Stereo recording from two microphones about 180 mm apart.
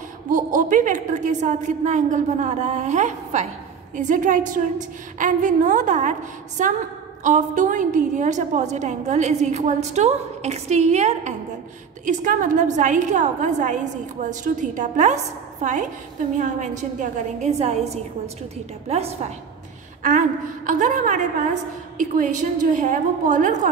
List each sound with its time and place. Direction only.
0.3 s a woman's voice: 45° right (ahead or behind)